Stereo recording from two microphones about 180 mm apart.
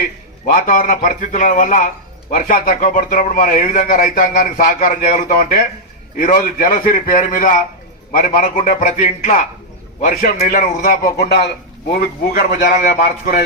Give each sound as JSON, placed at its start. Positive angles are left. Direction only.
{"t": 0.4, "sound": "a man's voice", "side_deg": 50}
{"t": 12.9, "sound": "speech", "side_deg": 50}